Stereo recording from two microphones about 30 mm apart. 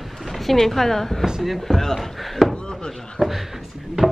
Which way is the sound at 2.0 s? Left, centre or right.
Centre.